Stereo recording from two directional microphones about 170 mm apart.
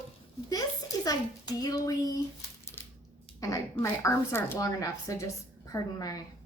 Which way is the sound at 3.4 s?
20° left (ahead or behind).